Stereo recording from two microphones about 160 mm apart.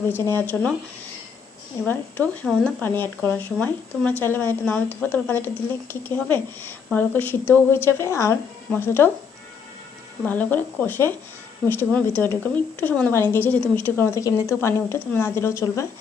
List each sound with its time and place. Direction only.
0.1 s speech: 15° left (ahead or behind)
1.8 s speech: 10° left (ahead or behind)
10.2 s speech: 10° left (ahead or behind)